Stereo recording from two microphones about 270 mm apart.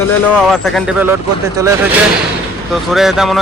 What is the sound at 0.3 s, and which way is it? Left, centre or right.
Speech, centre.